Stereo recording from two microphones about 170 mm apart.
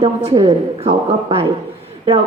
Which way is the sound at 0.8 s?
35° right (ahead or behind).